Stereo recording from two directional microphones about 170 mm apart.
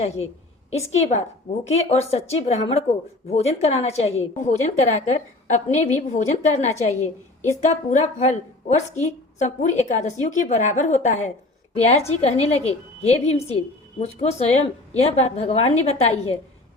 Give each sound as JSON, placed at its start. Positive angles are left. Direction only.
{"t": 0.9, "sound": "a woman's voice", "side_deg": 40}